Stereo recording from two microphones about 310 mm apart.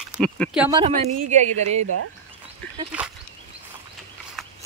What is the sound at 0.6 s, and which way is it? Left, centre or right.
A woman's voice, centre.